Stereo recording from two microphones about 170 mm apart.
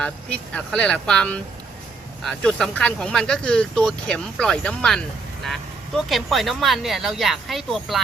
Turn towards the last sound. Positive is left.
turn(degrees=0)  # may be behind; listen again after turning